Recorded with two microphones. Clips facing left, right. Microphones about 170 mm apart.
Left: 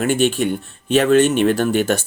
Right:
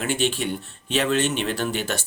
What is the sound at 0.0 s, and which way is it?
Speech, 50° left (ahead or behind).